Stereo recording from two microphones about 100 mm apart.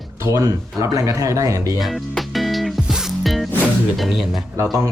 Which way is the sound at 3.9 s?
Centre (ahead or behind).